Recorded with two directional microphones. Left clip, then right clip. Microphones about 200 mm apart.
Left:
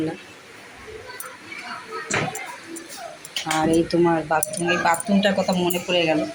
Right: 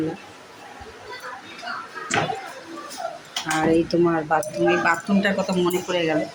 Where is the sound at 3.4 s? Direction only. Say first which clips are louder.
Even; 10° right (ahead or behind).